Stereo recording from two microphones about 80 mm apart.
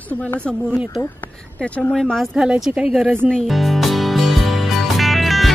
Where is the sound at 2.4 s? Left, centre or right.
Centre.